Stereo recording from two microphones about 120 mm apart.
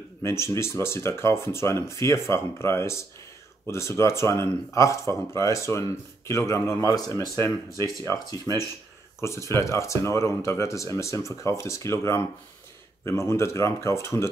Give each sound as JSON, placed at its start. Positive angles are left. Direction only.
{"t": 0.2, "sound": "speech", "side_deg": 25}